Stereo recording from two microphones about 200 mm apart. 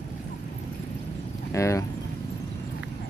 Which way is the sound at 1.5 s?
15° left (ahead or behind).